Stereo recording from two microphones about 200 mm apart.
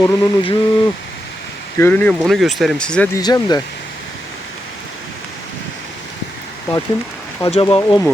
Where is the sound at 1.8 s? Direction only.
10° left (ahead or behind).